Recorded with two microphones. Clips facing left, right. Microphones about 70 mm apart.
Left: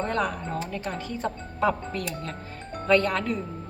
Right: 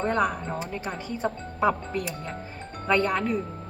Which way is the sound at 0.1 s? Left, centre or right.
Centre.